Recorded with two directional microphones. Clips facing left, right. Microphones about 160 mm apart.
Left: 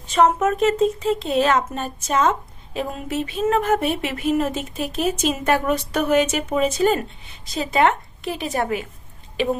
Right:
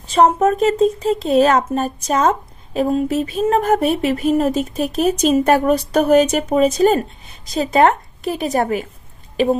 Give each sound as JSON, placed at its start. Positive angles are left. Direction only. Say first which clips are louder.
{"t": 0.1, "sound": "speech", "louder": "right 4 dB", "side_deg": -35}